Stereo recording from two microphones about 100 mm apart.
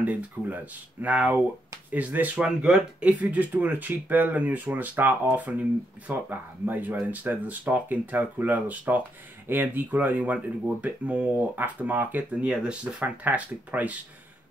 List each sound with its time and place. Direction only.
0.0 s speech: 15° right (ahead or behind)